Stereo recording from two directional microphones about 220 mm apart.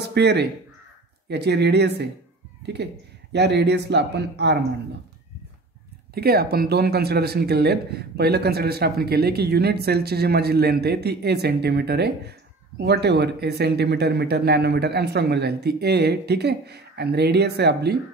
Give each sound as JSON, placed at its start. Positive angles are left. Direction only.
{"t": 0.0, "sound": "speech", "side_deg": -50}
{"t": 6.1, "sound": "speech", "side_deg": -45}